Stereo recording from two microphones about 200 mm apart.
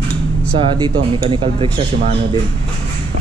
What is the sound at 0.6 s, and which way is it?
Speech, 25° right (ahead or behind).